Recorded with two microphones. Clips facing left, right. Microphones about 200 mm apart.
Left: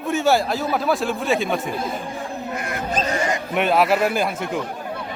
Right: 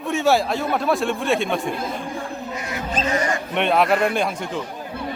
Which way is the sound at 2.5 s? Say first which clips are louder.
Left 2 dB; 55° left (ahead or behind).